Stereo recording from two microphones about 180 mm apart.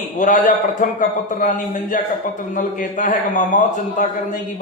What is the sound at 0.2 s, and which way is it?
A man's voice, 45° left (ahead or behind).